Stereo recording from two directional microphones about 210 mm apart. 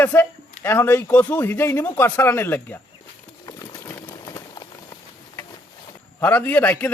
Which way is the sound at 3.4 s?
15° left (ahead or behind).